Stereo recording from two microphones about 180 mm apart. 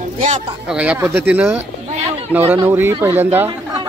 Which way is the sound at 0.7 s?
5° right (ahead or behind).